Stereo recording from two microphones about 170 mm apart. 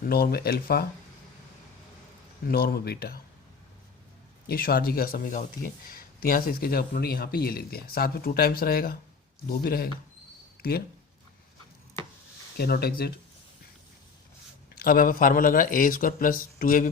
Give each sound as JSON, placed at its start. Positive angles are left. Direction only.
{"t": 0.0, "sound": "speech", "side_deg": 65}
{"t": 2.5, "sound": "speech", "side_deg": 65}
{"t": 4.4, "sound": "speech", "side_deg": 65}
{"t": 12.5, "sound": "speech", "side_deg": 65}
{"t": 14.8, "sound": "speech", "side_deg": 60}